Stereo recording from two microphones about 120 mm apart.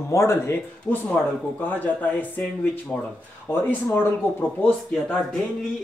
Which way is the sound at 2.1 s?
15° left (ahead or behind).